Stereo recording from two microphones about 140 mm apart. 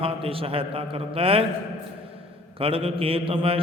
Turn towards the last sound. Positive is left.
turn(degrees=-40)  # may be behind; listen again after turning